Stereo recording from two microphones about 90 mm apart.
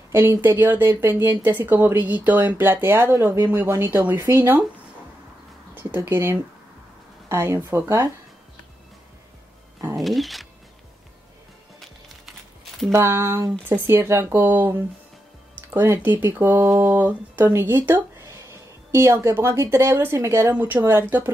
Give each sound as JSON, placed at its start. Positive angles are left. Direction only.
{"t": 0.1, "sound": "speech", "side_deg": -25}
{"t": 5.8, "sound": "speech", "side_deg": -25}
{"t": 9.9, "sound": "speech", "side_deg": 0}
{"t": 12.9, "sound": "speech", "side_deg": -30}